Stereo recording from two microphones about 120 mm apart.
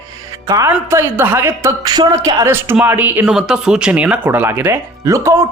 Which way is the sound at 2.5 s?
20° right (ahead or behind).